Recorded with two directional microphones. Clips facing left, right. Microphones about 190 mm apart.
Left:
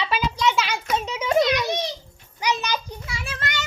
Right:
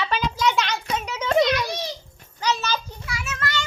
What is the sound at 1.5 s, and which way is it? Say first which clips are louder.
Speech: left 1 dB; 20° left (ahead or behind).